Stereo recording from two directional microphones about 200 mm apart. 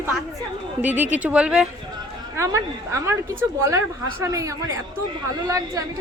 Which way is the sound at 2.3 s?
15° right (ahead or behind).